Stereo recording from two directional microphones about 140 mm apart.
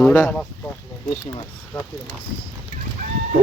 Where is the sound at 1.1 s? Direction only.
30° left (ahead or behind).